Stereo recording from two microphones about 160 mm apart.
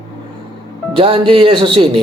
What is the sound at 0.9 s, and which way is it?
A man's voice, 30° right (ahead or behind).